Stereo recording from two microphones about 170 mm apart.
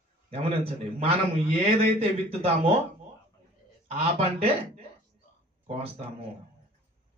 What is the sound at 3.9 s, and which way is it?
Speech, 40° right (ahead or behind).